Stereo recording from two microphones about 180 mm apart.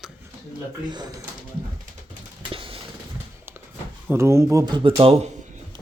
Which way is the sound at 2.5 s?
30° right (ahead or behind).